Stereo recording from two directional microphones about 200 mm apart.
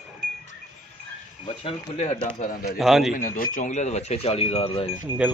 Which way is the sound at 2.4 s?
45° left (ahead or behind).